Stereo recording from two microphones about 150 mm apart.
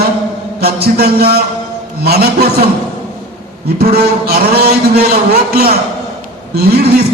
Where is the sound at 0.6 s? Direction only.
90° right.